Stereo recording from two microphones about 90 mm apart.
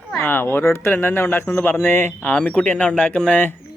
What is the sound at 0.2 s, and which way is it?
Speech, 25° left (ahead or behind).